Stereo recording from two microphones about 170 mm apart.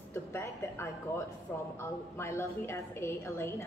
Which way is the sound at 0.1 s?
15° left (ahead or behind).